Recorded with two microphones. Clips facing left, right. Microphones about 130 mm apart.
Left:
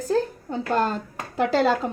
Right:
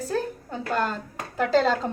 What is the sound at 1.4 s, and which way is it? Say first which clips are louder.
Speech: left 1 dB; 15° left (ahead or behind).